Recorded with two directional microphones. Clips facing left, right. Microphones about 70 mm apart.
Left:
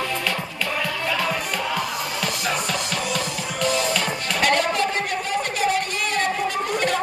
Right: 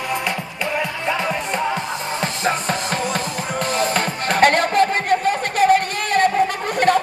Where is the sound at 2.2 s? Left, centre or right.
Right.